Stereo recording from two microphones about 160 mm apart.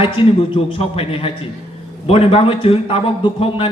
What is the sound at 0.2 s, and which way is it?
A man's voice, 35° left (ahead or behind).